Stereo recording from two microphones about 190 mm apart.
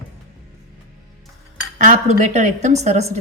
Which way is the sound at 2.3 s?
40° right (ahead or behind).